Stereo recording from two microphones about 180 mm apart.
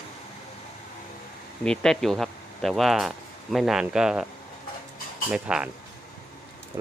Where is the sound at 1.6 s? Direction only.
5° left (ahead or behind).